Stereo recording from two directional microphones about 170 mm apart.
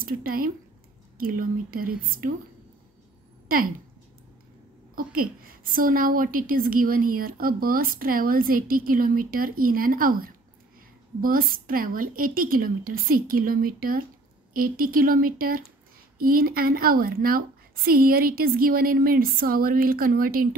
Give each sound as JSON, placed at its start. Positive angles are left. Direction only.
{"t": 0.0, "sound": "a woman's voice", "side_deg": -60}
{"t": 3.4, "sound": "a sound", "side_deg": -55}
{"t": 4.9, "sound": "a woman's voice", "side_deg": -60}